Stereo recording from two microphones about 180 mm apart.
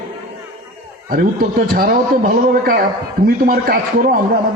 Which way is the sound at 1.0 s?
55° right (ahead or behind).